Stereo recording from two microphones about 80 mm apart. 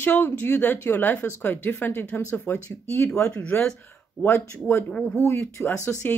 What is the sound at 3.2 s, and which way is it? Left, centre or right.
Speech, centre.